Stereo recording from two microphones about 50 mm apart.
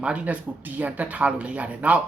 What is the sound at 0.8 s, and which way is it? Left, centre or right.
Speech, right.